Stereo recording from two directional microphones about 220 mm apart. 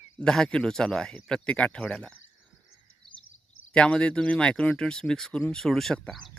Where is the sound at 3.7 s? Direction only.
5° left (ahead or behind).